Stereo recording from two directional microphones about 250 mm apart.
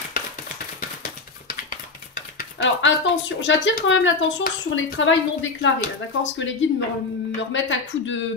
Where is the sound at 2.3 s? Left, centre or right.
Left.